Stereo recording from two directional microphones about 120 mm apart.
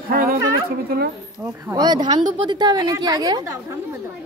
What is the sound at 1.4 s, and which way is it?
Speech, 25° right (ahead or behind).